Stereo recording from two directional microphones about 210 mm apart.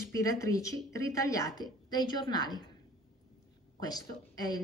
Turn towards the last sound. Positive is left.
turn(degrees=20)  # may be behind; listen again after turning